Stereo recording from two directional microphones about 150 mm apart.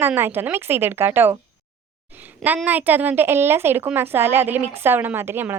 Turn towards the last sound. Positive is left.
turn(degrees=-15)  # may be behind; listen again after turning